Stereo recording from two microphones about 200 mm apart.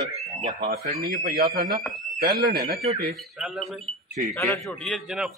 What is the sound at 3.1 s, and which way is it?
A man's voice, centre (ahead or behind).